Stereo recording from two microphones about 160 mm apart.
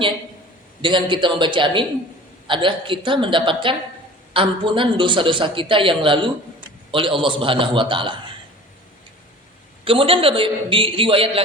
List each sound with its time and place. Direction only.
0.8 s a man's voice: 30° right (ahead or behind)
9.8 s a man's voice: 35° right (ahead or behind)